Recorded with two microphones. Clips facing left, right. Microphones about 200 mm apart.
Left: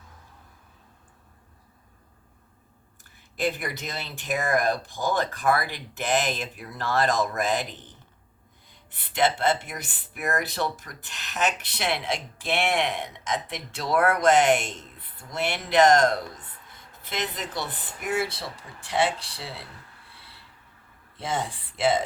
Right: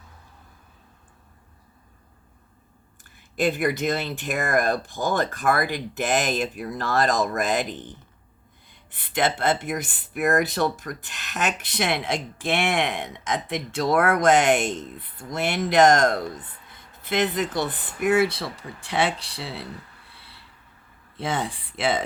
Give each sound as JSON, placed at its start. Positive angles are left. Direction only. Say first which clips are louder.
{"t": 3.3, "sound": "speech", "louder": "right 6 dB", "side_deg": -50}
{"t": 9.1, "sound": "speech", "louder": "right 1 dB", "side_deg": -50}
{"t": 21.2, "sound": "speech", "louder": "right 2 dB", "side_deg": -60}